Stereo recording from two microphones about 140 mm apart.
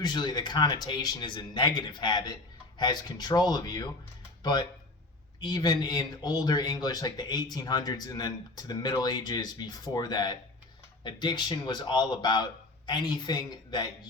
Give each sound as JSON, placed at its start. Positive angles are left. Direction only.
{"t": 0.0, "sound": "speech", "side_deg": 30}
{"t": 5.4, "sound": "speech", "side_deg": 30}